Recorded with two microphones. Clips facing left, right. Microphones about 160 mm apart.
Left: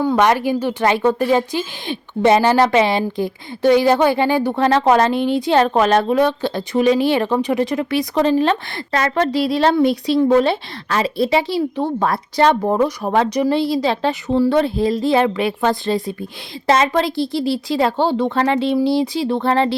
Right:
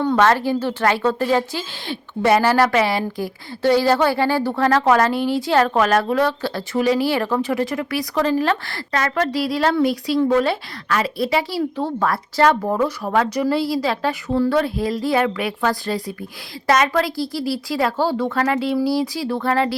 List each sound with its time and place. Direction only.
0.2 s speech: 15° left (ahead or behind)